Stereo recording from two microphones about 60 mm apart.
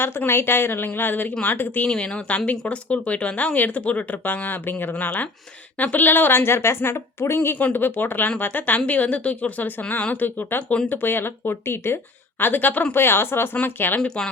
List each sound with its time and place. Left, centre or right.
0.3 s speech: left
1.8 s speech: centre; by 7.5 s left
7.6 s speech: left
12.4 s speech: left